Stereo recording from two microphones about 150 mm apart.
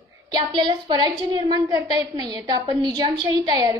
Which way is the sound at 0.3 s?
30° right (ahead or behind).